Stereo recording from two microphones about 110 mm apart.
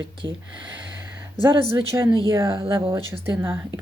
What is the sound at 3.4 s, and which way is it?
Speech, 20° right (ahead or behind).